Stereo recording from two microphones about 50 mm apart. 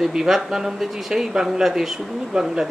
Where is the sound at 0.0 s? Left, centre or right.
Centre.